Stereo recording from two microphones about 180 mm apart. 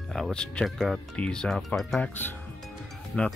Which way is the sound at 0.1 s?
5° left (ahead or behind).